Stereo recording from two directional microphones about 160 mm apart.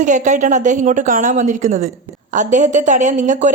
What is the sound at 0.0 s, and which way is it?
Speech, 50° right (ahead or behind).